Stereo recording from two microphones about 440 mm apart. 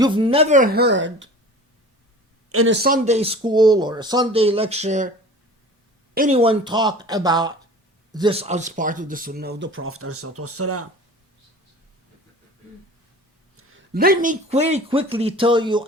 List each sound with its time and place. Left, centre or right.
0.0 s speech: centre
2.5 s speech: right
6.1 s speech: centre; by 10.8 s right
13.6 s speech: right; by 15.9 s centre